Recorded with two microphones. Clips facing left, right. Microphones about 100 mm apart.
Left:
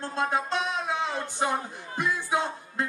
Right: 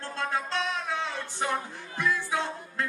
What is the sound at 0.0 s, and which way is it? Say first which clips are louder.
Music: left 3 dB; 20° left (ahead or behind).